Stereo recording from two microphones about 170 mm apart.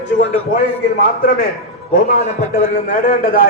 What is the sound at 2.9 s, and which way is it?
Speech, 60° left (ahead or behind).